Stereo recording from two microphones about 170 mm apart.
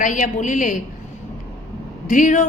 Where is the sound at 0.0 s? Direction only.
50° left (ahead or behind).